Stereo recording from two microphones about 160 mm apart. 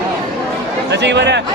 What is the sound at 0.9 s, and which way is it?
Chatter, 90° right.